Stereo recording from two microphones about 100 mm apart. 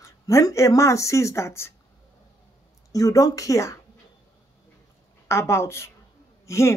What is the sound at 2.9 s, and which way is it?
Speech, 35° left (ahead or behind).